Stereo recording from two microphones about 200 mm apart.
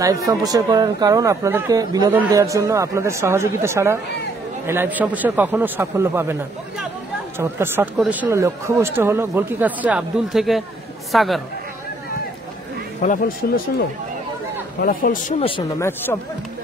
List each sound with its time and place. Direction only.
0.3 s speech: 20° right (ahead or behind)
7.3 s a man's voice: 10° right (ahead or behind)
13.0 s speech: 40° left (ahead or behind)
13.4 s speech: 55° left (ahead or behind)
14.8 s speech: 45° left (ahead or behind)